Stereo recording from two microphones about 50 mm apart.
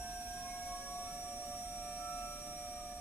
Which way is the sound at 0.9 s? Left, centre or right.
Left.